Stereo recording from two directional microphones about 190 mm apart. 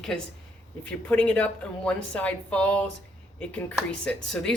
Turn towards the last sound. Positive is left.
turn(degrees=5)  # may be behind; listen again after turning